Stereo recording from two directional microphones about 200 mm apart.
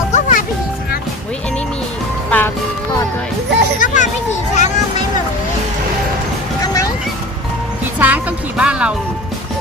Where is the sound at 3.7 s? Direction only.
40° left (ahead or behind).